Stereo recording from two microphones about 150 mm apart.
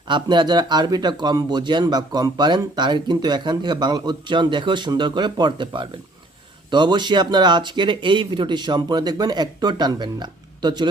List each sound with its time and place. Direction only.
0.1 s speech: 30° right (ahead or behind)